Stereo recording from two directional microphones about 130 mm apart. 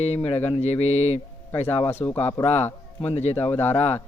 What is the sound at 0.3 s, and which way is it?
Speech, 50° left (ahead or behind).